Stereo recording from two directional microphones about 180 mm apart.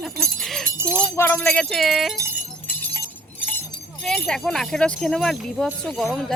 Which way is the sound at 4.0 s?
5° left (ahead or behind).